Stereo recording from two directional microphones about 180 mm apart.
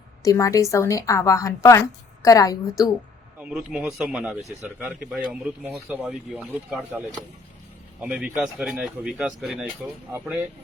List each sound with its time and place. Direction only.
0.2 s a woman's voice: 20° left (ahead or behind)
3.4 s speech: 5° right (ahead or behind)
8.0 s speech: 5° right (ahead or behind)